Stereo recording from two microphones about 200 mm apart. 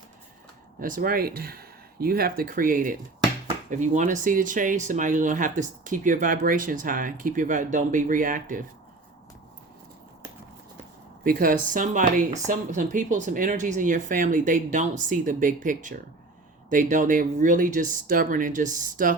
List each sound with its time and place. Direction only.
0.8 s speech: 45° right (ahead or behind)
11.2 s speech: 45° right (ahead or behind)